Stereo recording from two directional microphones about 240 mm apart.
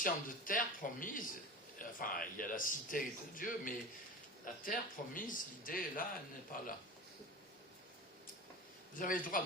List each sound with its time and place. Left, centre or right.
0.0 s speech: left
9.0 s speech: left